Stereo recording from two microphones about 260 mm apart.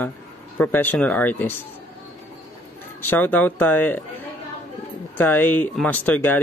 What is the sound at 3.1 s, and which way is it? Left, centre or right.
Speech, centre.